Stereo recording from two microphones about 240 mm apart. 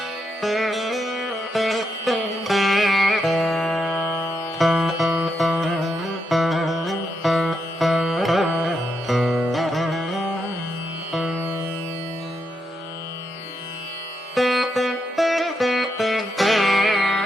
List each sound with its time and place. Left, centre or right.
0.4 s music: centre
14.3 s music: centre